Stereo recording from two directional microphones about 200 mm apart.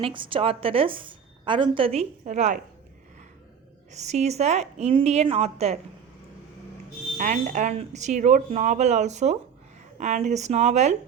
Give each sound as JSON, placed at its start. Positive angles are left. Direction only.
{"t": 0.0, "sound": "a woman's voice", "side_deg": -25}
{"t": 3.9, "sound": "speech", "side_deg": -35}
{"t": 7.2, "sound": "speech", "side_deg": -40}